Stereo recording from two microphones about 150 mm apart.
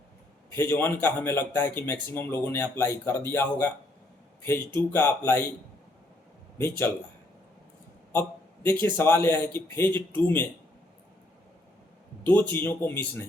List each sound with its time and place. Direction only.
0.5 s speech: 15° left (ahead or behind)
6.6 s speech: 15° left (ahead or behind)
8.6 s speech: 15° left (ahead or behind)
12.2 s speech: 10° left (ahead or behind)